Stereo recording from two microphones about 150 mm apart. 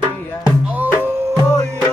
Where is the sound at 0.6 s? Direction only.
10° right (ahead or behind).